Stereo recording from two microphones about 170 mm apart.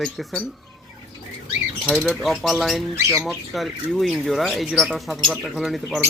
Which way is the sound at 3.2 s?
Centre (ahead or behind).